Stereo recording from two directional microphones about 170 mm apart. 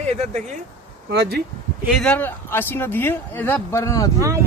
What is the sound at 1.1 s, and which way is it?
Speech, 75° right (ahead or behind).